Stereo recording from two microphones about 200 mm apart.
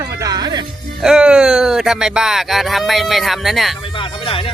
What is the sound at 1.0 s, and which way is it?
Speech, 5° right (ahead or behind).